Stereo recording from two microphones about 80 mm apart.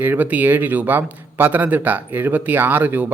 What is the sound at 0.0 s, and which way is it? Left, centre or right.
A man's voice, right.